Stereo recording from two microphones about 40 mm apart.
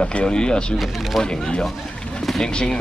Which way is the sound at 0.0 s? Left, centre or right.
Left.